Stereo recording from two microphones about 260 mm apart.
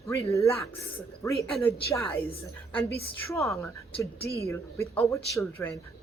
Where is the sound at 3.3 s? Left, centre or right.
Centre.